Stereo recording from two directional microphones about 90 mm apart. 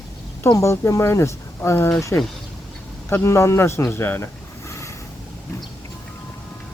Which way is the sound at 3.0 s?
30° left (ahead or behind).